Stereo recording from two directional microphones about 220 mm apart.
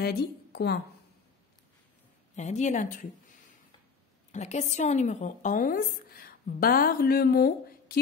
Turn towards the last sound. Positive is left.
turn(degrees=45)  # may be behind; listen again after turning